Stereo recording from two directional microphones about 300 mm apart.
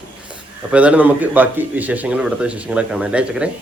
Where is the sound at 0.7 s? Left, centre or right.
Centre.